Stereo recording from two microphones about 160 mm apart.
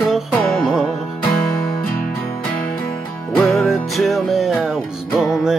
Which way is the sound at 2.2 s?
5° left (ahead or behind).